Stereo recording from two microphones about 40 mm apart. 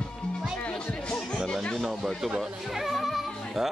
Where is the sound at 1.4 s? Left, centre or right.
Centre.